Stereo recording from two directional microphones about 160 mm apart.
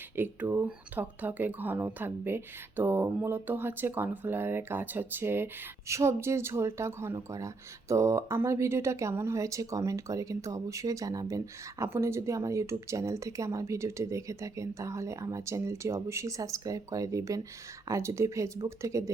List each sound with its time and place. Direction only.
0.2 s speech: 15° right (ahead or behind)